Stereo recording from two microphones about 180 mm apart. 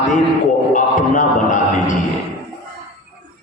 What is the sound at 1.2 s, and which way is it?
Speech, 45° left (ahead or behind).